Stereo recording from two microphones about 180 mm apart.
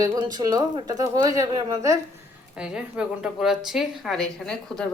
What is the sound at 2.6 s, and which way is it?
A woman's voice, 5° right (ahead or behind).